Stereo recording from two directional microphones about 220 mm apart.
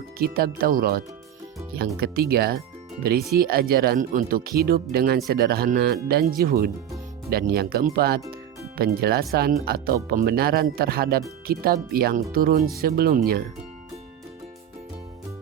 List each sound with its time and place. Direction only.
0.2 s speech: 45° right (ahead or behind)
8.3 s music: 45° right (ahead or behind)
9.3 s speech: 45° right (ahead or behind)